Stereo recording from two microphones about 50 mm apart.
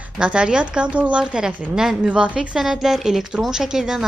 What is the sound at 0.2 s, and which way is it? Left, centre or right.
A woman's voice, right.